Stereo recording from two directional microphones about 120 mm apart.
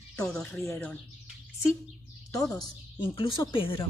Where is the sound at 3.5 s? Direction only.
45° left (ahead or behind).